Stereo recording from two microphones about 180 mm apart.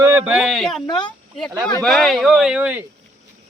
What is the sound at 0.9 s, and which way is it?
Speech, 25° left (ahead or behind).